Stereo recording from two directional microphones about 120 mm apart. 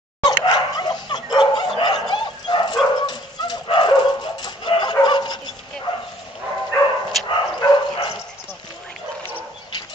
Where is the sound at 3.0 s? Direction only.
35° left (ahead or behind).